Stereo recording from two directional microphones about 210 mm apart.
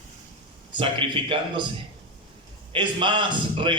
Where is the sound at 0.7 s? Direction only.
25° right (ahead or behind).